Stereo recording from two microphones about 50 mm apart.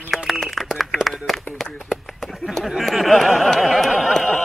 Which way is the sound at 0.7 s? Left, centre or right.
Centre.